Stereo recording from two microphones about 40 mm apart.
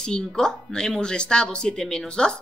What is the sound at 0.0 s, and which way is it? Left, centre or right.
A woman's voice, centre.